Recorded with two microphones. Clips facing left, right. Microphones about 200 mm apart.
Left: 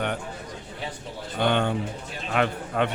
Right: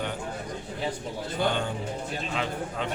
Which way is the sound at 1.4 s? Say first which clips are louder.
Left 5 dB; 65° left (ahead or behind).